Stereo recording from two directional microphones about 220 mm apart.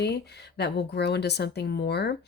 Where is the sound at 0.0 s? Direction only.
50° left (ahead or behind).